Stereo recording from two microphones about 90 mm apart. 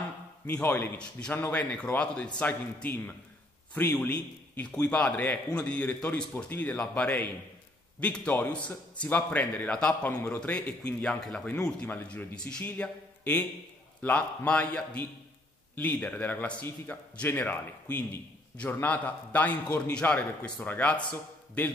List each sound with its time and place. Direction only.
0.5 s speech: 15° left (ahead or behind)
11.9 s speech: 20° left (ahead or behind)